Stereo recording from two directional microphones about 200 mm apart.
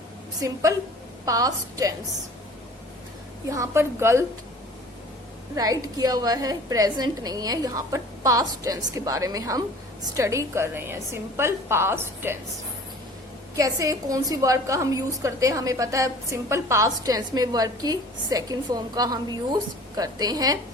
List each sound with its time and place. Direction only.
0.4 s a woman's voice: 15° right (ahead or behind)
3.5 s a woman's voice: 15° right (ahead or behind)
5.5 s a woman's voice: 20° right (ahead or behind)
13.6 s a woman's voice: 15° right (ahead or behind)